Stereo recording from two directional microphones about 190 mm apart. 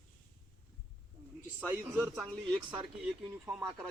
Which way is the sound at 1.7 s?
15° right (ahead or behind).